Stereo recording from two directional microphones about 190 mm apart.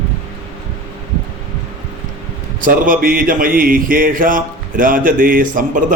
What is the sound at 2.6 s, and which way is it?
Speech, 45° right (ahead or behind).